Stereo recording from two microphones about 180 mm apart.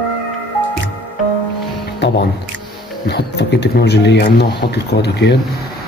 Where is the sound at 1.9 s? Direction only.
70° left (ahead or behind).